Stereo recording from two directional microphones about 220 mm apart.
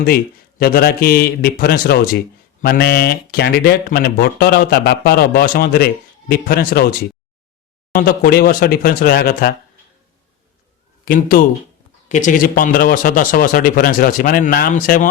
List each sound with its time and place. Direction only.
0.6 s speech: 45° left (ahead or behind)
7.9 s speech: 40° left (ahead or behind)
11.0 s a man's voice: 40° left (ahead or behind)